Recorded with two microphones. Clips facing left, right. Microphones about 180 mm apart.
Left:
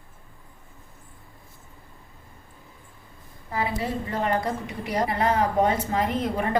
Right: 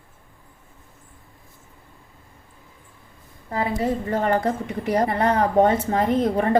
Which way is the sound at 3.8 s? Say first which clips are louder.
Right 5 dB; 45° right (ahead or behind).